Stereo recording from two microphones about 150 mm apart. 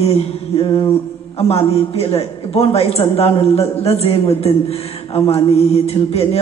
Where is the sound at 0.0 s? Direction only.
40° left (ahead or behind).